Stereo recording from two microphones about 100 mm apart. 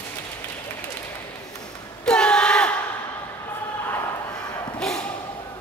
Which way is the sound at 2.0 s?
10° left (ahead or behind).